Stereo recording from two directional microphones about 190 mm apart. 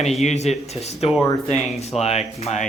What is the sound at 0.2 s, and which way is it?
Speech, 35° left (ahead or behind).